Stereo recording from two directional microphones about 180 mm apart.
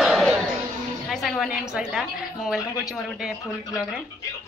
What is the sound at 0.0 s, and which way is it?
Music, centre (ahead or behind).